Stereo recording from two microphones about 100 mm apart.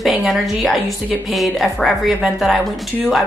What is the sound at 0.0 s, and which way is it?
Speech, centre (ahead or behind).